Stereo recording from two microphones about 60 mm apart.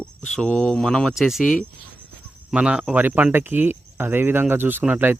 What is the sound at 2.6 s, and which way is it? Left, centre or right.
Speech, centre.